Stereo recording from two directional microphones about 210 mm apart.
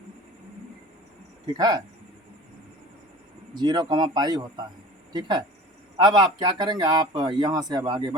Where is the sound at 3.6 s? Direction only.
20° right (ahead or behind).